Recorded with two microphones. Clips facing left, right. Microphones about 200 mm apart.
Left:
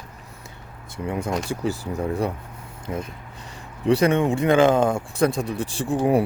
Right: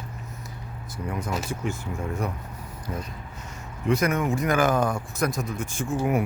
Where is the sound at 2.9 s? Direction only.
15° left (ahead or behind).